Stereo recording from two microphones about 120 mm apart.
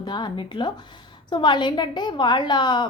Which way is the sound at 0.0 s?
40° left (ahead or behind).